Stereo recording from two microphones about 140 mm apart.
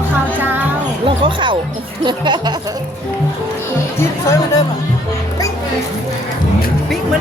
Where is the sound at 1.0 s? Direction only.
35° right (ahead or behind).